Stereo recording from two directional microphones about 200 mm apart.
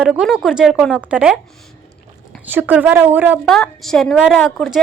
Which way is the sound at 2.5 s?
10° right (ahead or behind).